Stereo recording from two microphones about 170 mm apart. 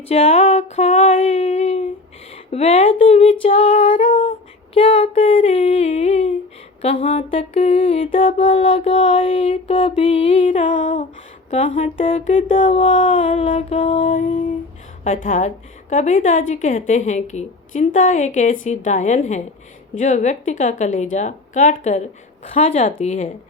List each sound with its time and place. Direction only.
0.1 s music: 40° left (ahead or behind)
2.3 s speech: 35° left (ahead or behind)
3.4 s music: 35° left (ahead or behind)
4.7 s a sound: 30° left (ahead or behind)
6.8 s music: 35° left (ahead or behind); by 11.0 s 50° left (ahead or behind)
11.5 s music: 35° left (ahead or behind)
14.1 s a woman's voice: 45° left (ahead or behind)
22.5 s music: 40° left (ahead or behind)